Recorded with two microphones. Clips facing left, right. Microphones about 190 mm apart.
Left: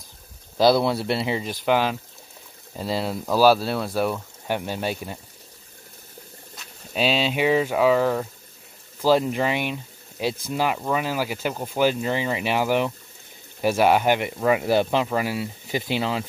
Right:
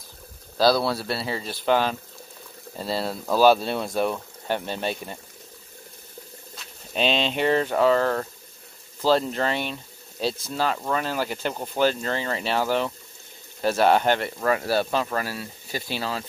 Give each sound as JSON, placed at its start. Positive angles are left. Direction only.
{"t": 0.6, "sound": "speech", "side_deg": 20}
{"t": 6.9, "sound": "speech", "side_deg": 5}